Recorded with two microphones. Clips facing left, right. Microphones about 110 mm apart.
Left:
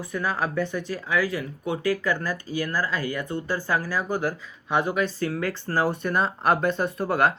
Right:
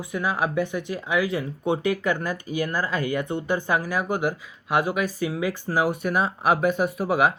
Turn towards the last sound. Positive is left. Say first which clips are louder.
# right 1 dB
turn(degrees=-10)  # may be behind; listen again after turning